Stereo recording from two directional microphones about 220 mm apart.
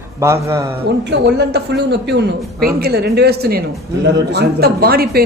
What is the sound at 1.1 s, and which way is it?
A man's voice, 50° right (ahead or behind).